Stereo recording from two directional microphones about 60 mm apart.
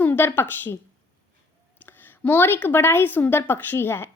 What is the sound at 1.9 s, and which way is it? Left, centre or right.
A woman's voice, left.